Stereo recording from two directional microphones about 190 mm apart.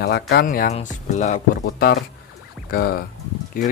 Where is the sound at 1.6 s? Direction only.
55° left (ahead or behind).